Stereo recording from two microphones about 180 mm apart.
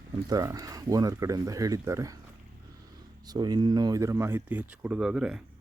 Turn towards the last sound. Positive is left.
turn(degrees=-5)  # may be behind; listen again after turning